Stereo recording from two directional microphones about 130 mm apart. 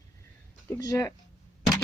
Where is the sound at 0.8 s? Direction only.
25° left (ahead or behind).